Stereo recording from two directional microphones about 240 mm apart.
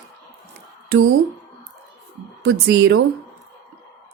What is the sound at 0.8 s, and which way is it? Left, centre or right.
Speech, right.